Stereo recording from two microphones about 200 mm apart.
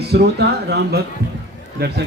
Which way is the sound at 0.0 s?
55° right (ahead or behind).